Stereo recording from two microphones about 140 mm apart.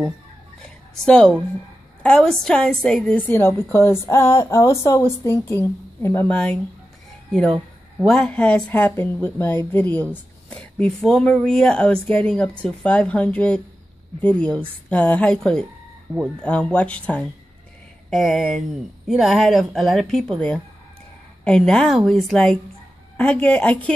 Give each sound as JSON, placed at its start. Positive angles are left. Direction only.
{"t": 0.6, "sound": "a sound", "side_deg": 5}
{"t": 2.0, "sound": "a woman's voice", "side_deg": 5}
{"t": 8.0, "sound": "a woman's voice", "side_deg": 5}